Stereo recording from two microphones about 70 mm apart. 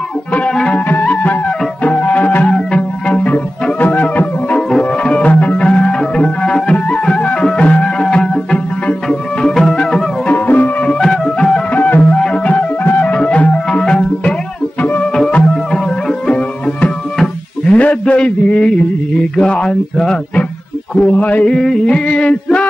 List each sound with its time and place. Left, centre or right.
0.3 s music: centre
0.7 s music: left
4.6 s music: centre
11.0 s music: centre
11.7 s music: left
17.7 s a sound: centre
19.3 s music: centre
21.0 s mantra: centre
21.5 s a sound: centre